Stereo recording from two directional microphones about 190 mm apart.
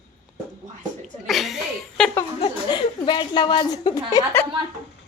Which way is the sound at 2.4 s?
25° left (ahead or behind).